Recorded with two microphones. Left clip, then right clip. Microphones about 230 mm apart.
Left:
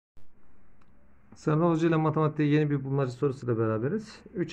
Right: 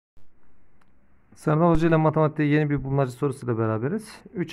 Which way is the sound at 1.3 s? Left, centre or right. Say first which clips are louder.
Right 5 dB; right.